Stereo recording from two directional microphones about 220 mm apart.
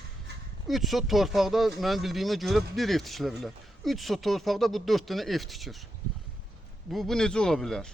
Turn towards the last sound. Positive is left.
turn(degrees=0)  # may be behind; listen again after turning